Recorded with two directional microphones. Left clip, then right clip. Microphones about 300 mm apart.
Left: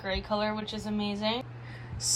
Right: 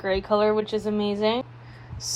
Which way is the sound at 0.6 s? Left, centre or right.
Centre.